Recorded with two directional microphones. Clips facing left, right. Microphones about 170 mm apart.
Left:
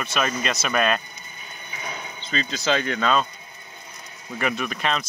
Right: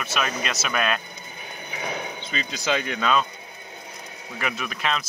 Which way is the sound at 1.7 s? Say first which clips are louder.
Right 5 dB; 70° right (ahead or behind).